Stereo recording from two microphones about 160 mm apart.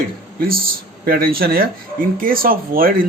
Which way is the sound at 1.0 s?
70° right (ahead or behind).